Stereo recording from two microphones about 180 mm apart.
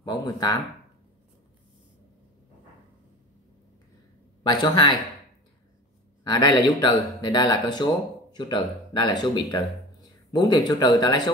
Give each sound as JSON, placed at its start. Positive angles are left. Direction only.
{"t": 0.0, "sound": "speech", "side_deg": 20}
{"t": 4.4, "sound": "speech", "side_deg": 25}
{"t": 6.2, "sound": "speech", "side_deg": 25}
{"t": 10.7, "sound": "speech", "side_deg": 25}